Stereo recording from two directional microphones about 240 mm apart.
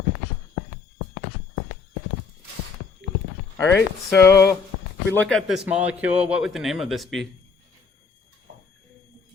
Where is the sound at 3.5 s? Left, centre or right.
Centre.